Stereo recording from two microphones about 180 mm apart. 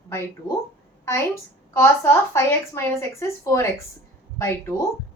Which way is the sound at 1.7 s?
15° left (ahead or behind).